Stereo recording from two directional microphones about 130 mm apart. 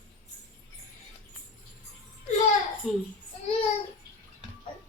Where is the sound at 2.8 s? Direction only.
Centre (ahead or behind).